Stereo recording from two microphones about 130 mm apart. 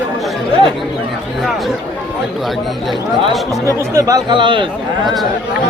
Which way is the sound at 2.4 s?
Centre (ahead or behind).